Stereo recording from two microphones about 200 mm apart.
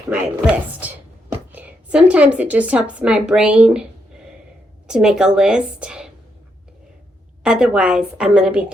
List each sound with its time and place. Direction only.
0.1 s a woman's voice: 5° right (ahead or behind)
4.9 s a woman's voice: 5° right (ahead or behind)
7.4 s a woman's voice: 5° right (ahead or behind)